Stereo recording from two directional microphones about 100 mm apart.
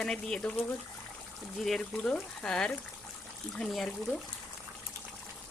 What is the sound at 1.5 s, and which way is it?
Speech, centre (ahead or behind).